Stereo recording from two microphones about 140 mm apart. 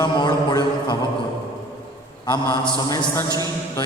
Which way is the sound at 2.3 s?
30° left (ahead or behind).